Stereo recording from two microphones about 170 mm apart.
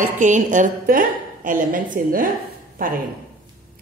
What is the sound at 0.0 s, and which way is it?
A woman's voice, 45° right (ahead or behind).